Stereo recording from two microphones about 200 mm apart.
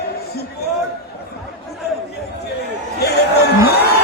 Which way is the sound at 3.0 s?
55° left (ahead or behind).